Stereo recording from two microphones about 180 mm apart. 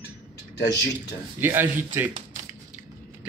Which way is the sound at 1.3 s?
10° right (ahead or behind).